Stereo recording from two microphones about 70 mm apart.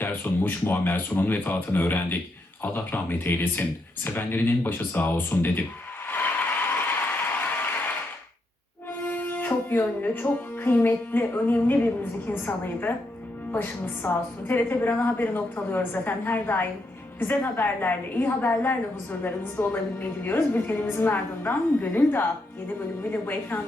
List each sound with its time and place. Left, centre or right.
0.0 s a woman's voice: left
6.1 s applause: left
9.0 s speech: left
13.5 s a woman's voice: left